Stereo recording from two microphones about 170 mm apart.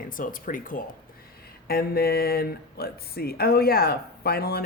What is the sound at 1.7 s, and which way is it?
Speech, 65° left (ahead or behind).